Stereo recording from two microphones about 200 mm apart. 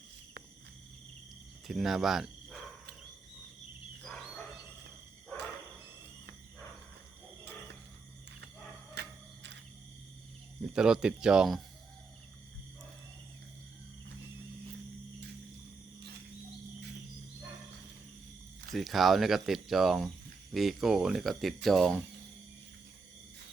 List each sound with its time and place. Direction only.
1.6 s speech: centre (ahead or behind)
9.0 s a sound: 65° right (ahead or behind)
10.6 s speech: 5° right (ahead or behind)
18.7 s speech: centre (ahead or behind)